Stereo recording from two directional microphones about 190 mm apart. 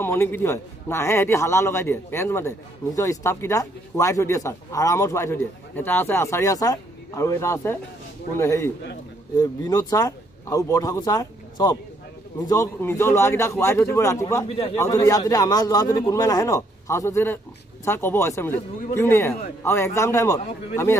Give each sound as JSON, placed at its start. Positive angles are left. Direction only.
{"t": 0.0, "sound": "a man's voice", "side_deg": 10}